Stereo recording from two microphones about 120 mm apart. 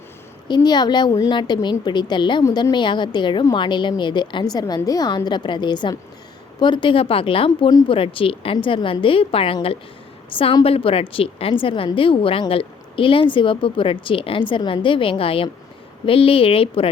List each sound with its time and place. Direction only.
0.4 s a woman's voice: 35° left (ahead or behind)
2.4 s a woman's voice: 30° left (ahead or behind); by 16.9 s 50° left (ahead or behind)